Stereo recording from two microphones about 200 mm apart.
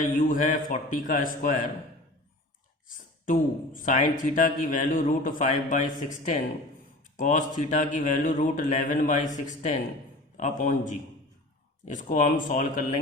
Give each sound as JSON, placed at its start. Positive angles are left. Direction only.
{"t": 0.0, "sound": "a man's voice", "side_deg": 40}
{"t": 3.2, "sound": "a man's voice", "side_deg": 40}
{"t": 10.3, "sound": "a man's voice", "side_deg": 40}